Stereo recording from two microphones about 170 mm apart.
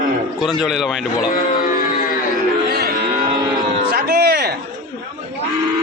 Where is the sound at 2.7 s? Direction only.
70° right (ahead or behind).